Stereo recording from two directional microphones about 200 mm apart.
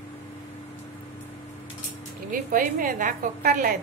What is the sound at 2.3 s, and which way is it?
A woman's voice, 45° right (ahead or behind).